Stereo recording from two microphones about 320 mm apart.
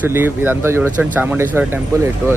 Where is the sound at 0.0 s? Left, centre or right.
Centre.